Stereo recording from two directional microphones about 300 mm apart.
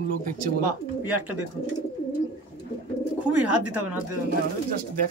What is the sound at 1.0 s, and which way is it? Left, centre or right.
Speech, centre.